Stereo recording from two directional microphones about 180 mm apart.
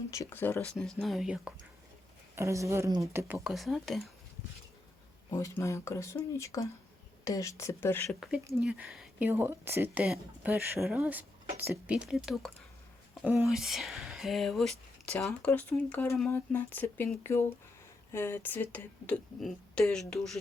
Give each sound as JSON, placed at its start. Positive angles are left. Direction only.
{"t": 0.1, "sound": "speech", "side_deg": 15}
{"t": 2.3, "sound": "speech", "side_deg": -15}
{"t": 3.4, "sound": "speech", "side_deg": 0}
{"t": 5.3, "sound": "speech", "side_deg": 15}
{"t": 8.6, "sound": "speech", "side_deg": -5}